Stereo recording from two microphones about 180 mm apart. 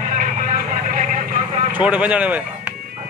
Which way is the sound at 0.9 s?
40° right (ahead or behind).